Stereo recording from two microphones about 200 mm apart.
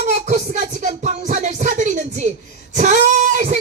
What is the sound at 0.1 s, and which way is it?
Music, 35° right (ahead or behind).